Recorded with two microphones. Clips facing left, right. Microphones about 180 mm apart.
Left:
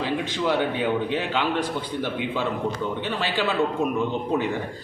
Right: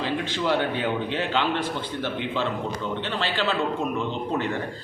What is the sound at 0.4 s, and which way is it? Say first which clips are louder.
A man's voice: left 1 dB; 10° left (ahead or behind).